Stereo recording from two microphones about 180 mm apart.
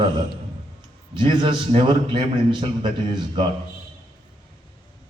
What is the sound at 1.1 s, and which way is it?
A man's voice, 25° right (ahead or behind).